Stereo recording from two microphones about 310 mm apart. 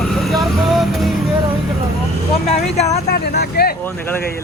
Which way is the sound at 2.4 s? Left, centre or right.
Left.